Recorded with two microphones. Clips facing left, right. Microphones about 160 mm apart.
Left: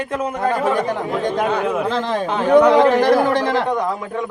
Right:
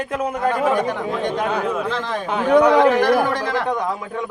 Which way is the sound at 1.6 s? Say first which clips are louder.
Left 2 dB; 20° left (ahead or behind).